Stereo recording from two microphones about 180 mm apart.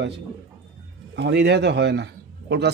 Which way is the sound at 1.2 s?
75° right (ahead or behind).